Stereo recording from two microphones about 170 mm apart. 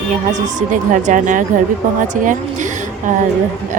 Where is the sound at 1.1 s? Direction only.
50° right (ahead or behind).